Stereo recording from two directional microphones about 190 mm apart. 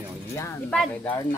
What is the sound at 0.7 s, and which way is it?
Speech, 5° left (ahead or behind).